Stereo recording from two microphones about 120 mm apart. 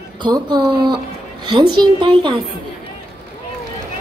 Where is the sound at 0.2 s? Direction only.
40° right (ahead or behind).